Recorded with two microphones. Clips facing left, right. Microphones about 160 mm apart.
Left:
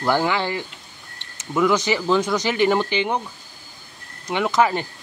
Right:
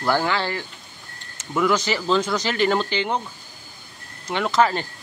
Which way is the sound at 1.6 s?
15° left (ahead or behind).